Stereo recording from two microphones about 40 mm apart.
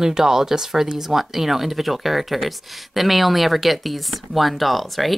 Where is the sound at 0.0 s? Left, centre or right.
Centre.